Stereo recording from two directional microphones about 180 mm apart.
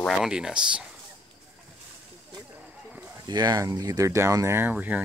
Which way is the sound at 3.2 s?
20° right (ahead or behind).